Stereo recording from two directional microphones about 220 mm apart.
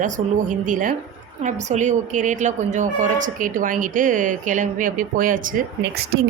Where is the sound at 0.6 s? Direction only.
35° right (ahead or behind).